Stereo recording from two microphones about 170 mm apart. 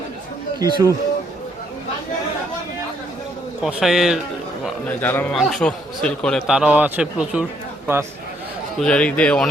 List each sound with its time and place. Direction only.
0.6 s speech: 20° right (ahead or behind)
3.6 s a man's voice: centre (ahead or behind)
4.9 s a man's voice: 10° left (ahead or behind); by 7.4 s 5° right (ahead or behind)
8.8 s speech: 5° left (ahead or behind)